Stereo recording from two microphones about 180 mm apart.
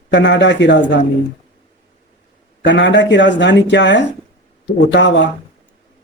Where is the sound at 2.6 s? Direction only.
80° left.